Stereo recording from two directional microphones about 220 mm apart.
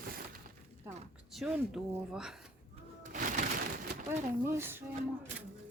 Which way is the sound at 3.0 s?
35° right (ahead or behind).